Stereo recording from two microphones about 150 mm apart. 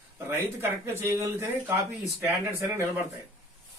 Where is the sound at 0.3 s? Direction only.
15° right (ahead or behind).